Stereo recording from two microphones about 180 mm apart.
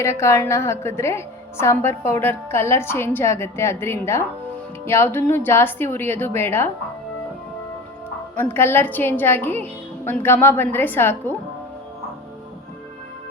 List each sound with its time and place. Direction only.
0.0 s a woman's voice: 15° left (ahead or behind)
8.4 s a woman's voice: 10° left (ahead or behind)